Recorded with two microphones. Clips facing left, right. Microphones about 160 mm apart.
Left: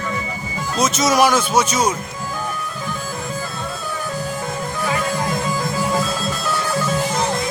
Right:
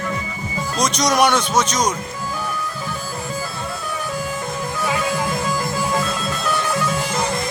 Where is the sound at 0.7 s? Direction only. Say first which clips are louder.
Left 2 dB; 5° left (ahead or behind).